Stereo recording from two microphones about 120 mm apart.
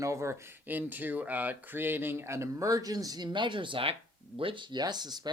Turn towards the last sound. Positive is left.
turn(degrees=-35)  # may be behind; listen again after turning